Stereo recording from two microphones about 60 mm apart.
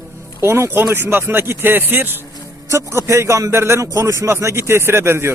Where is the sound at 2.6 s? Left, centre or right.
Right.